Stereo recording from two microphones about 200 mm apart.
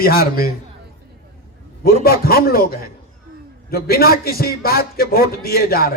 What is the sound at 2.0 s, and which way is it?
A man's voice, 50° left (ahead or behind).